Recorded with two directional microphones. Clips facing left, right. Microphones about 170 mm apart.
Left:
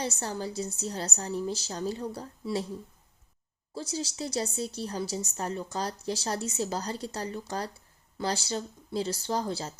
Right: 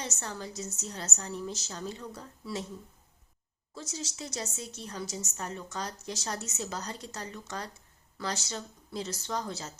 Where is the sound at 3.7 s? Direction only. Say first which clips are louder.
Left 6 dB; 30° left (ahead or behind).